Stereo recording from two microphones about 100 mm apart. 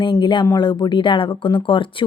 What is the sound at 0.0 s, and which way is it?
Speech, 50° left (ahead or behind).